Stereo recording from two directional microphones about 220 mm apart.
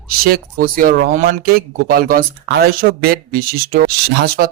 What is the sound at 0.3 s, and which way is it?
Speech, 40° right (ahead or behind).